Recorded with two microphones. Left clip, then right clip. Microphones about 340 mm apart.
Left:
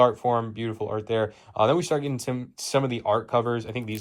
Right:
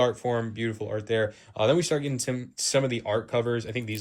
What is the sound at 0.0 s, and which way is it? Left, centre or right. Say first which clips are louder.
Speech: left 5 dB; centre.